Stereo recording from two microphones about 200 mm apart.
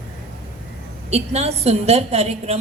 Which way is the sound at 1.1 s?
30° right (ahead or behind).